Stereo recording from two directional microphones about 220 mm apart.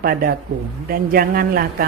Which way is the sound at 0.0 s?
40° right (ahead or behind).